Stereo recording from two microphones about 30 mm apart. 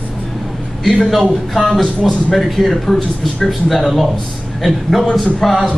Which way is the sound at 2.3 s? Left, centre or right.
Centre.